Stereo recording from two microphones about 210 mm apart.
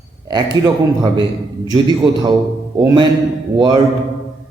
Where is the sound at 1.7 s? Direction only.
20° right (ahead or behind).